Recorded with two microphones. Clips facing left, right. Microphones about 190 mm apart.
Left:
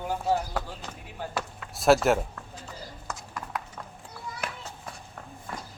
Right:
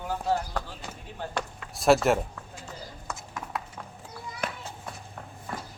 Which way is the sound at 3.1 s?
Centre (ahead or behind).